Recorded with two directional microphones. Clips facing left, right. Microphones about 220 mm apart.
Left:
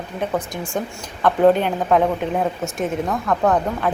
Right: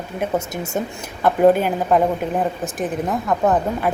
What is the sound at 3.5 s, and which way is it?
Speech, 5° right (ahead or behind).